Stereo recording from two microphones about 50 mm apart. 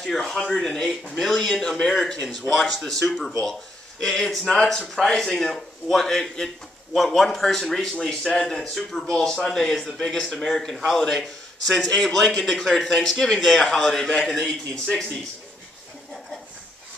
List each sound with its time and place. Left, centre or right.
0.0 s a man's voice: centre
14.4 s speech: left